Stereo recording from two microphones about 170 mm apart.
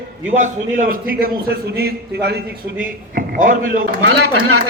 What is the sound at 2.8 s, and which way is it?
A man's voice, 55° right (ahead or behind).